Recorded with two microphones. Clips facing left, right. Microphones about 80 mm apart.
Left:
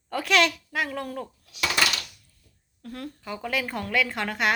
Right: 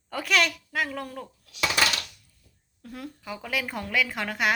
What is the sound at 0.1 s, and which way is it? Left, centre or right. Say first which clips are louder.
A woman's voice: left 3 dB; centre.